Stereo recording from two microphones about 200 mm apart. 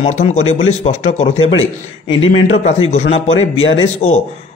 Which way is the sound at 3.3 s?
75° left (ahead or behind).